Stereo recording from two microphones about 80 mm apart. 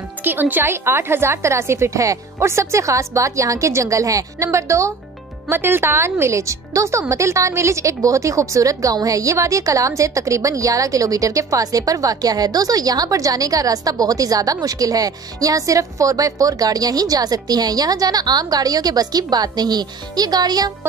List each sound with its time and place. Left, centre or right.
0.2 s a woman's voice: right